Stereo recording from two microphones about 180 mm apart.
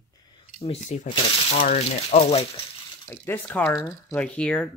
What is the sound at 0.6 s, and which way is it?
Speech, 40° left (ahead or behind).